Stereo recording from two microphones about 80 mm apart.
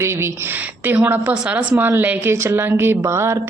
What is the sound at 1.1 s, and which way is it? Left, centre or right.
A man's voice, centre.